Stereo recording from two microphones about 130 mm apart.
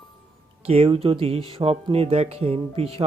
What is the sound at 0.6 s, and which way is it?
Speech, 50° right (ahead or behind).